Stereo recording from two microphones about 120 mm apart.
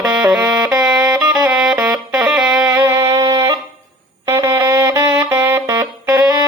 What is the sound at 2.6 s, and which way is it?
Music, 25° right (ahead or behind).